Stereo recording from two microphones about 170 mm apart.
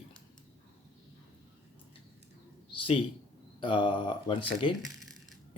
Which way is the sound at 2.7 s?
35° left (ahead or behind).